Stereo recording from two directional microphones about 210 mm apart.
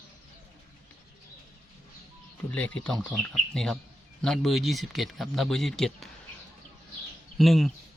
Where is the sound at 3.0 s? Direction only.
Centre (ahead or behind).